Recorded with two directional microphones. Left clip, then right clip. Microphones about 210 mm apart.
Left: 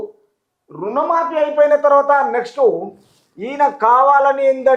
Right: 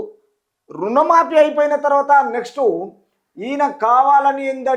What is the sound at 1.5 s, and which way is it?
A woman's voice, 40° right (ahead or behind).